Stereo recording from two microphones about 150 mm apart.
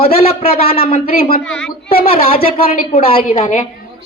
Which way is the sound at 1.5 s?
5° left (ahead or behind).